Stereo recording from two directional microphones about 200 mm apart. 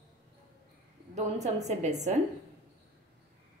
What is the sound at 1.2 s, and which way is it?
Speech, 35° right (ahead or behind).